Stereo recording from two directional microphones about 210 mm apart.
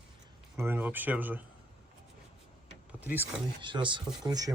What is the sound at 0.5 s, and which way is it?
Speech, 10° right (ahead or behind).